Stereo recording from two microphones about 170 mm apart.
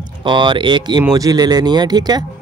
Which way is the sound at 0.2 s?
30° right (ahead or behind).